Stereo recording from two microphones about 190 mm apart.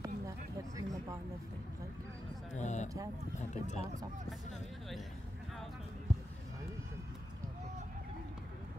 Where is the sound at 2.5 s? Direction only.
40° left (ahead or behind).